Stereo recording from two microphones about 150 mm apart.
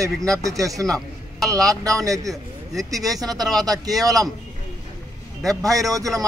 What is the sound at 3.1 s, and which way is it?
Speech, 25° right (ahead or behind).